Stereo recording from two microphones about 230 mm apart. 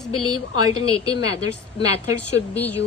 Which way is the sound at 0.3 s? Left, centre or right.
Left.